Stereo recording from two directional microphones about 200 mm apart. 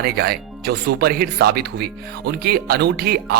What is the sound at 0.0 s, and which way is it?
Speech, 50° right (ahead or behind).